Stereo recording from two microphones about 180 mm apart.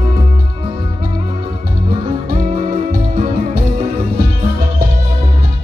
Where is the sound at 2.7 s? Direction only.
35° right (ahead or behind).